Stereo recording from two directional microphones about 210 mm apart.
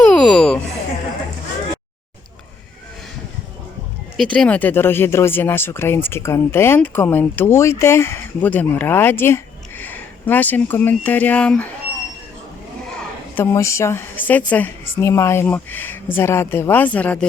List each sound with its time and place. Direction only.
0.0 s a sound: 5° left (ahead or behind)
4.2 s speech: 5° left (ahead or behind)
13.3 s speech: 15° left (ahead or behind)